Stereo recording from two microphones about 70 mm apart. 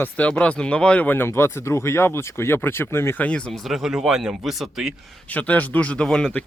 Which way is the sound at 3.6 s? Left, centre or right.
Centre.